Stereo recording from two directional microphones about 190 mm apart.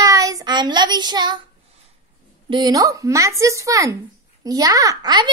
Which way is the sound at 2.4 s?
25° right (ahead or behind).